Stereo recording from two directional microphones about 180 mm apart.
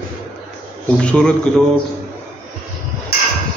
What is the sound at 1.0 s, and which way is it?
Speech, 5° left (ahead or behind).